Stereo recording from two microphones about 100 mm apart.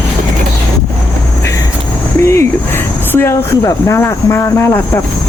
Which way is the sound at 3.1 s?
25° left (ahead or behind).